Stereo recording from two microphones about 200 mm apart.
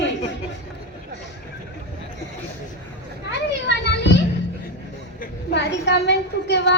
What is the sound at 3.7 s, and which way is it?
Children playing, 60° left (ahead or behind).